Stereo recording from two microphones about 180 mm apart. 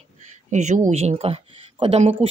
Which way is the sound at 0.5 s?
40° right (ahead or behind).